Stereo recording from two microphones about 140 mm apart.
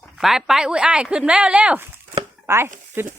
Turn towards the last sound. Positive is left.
turn(degrees=-15)  # may be behind; listen again after turning